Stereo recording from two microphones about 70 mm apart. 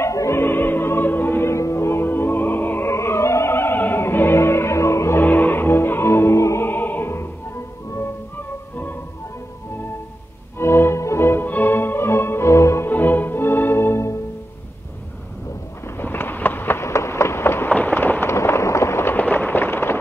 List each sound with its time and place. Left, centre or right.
0.0 s music: left
0.4 s music: left
1.5 s music: left
5.2 s music: left
6.7 s opera: left
10.6 s music: left
12.9 s music: left
16.0 s a sound: left
17.6 s a sound: left
19.1 s fireworks: left